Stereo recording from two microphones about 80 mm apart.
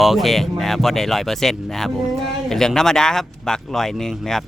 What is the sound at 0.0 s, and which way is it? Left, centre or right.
Speech, centre.